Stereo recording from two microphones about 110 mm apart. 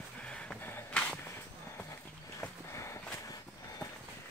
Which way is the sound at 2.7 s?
25° left (ahead or behind).